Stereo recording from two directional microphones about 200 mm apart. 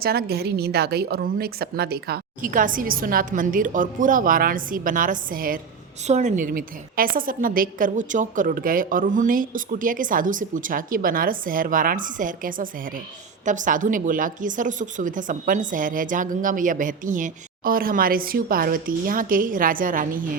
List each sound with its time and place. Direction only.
0.0 s a woman's voice: 50° right (ahead or behind)